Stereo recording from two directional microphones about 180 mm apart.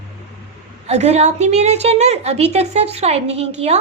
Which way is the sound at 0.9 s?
35° right (ahead or behind).